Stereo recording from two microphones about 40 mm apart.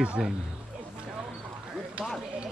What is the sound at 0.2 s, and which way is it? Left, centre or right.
Speech, centre.